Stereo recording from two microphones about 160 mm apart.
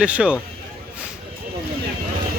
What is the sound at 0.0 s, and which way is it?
Speech, 10° right (ahead or behind).